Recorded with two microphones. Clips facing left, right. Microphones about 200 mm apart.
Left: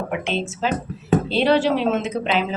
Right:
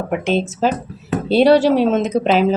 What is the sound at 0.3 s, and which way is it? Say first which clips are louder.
Speech: right 8 dB; 40° right (ahead or behind).